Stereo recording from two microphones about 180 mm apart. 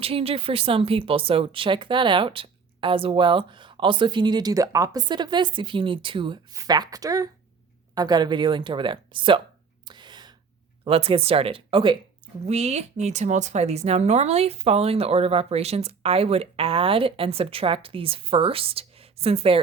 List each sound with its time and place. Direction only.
0.0 s speech: 30° right (ahead or behind)
9.8 s gasp: 25° right (ahead or behind)
10.8 s speech: 30° right (ahead or behind)